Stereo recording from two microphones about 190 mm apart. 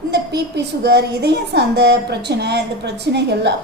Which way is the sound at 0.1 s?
60° right (ahead or behind).